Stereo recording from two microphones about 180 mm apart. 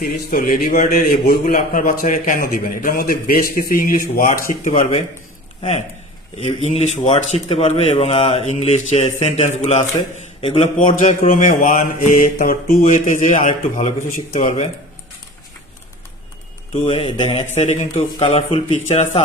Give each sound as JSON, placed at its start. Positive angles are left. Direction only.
{"t": 0.3, "sound": "a man's voice", "side_deg": 55}
{"t": 4.6, "sound": "speech", "side_deg": 35}
{"t": 6.4, "sound": "speech", "side_deg": 35}
{"t": 10.8, "sound": "a man's voice", "side_deg": 50}
{"t": 16.8, "sound": "speech", "side_deg": 30}